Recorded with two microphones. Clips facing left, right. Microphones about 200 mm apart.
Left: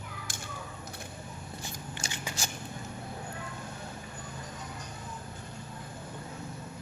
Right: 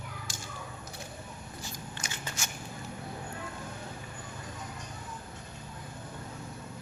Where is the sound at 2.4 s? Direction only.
35° left (ahead or behind).